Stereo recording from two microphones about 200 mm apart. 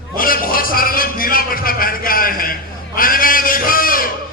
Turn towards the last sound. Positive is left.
turn(degrees=45)  # may be behind; listen again after turning